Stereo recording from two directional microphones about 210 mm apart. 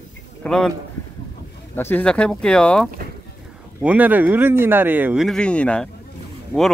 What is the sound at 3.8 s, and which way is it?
Speech, 5° right (ahead or behind).